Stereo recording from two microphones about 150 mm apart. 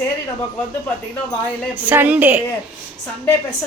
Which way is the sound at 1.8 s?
10° right (ahead or behind).